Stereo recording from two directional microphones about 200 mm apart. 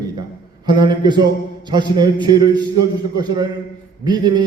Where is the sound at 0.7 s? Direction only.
20° right (ahead or behind).